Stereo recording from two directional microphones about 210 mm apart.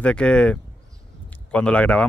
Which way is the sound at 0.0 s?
5° left (ahead or behind).